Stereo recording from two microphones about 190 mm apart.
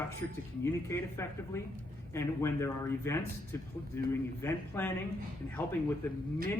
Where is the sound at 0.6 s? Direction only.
15° left (ahead or behind).